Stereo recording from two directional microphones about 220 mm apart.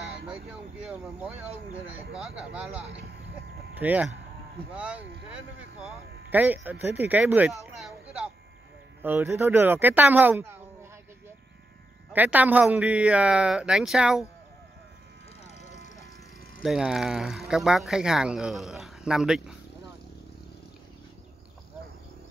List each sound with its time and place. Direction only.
0.3 s vehicle: 5° right (ahead or behind)
1.9 s speech: 5° right (ahead or behind)
3.8 s speech: 5° right (ahead or behind)
15.4 s vehicle: 30° left (ahead or behind)
16.6 s speech: centre (ahead or behind)